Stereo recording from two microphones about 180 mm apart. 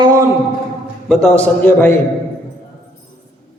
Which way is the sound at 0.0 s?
20° right (ahead or behind).